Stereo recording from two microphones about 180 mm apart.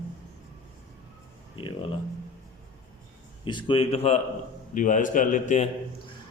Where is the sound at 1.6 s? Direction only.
30° left (ahead or behind).